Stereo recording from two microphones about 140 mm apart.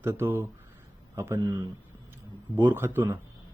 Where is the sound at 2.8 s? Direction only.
15° right (ahead or behind).